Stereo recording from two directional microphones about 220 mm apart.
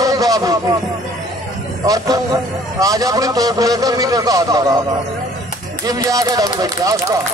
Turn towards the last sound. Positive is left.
turn(degrees=-15)  # may be behind; listen again after turning